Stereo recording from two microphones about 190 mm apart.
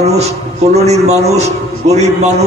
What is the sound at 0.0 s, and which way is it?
A man's voice, 35° right (ahead or behind).